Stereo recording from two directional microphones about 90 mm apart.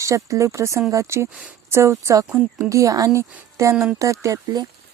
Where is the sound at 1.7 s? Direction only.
30° right (ahead or behind).